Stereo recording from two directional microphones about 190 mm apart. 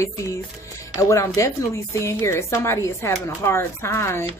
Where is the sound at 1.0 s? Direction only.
15° left (ahead or behind).